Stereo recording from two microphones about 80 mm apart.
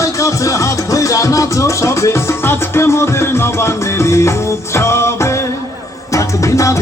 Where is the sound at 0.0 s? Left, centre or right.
Left.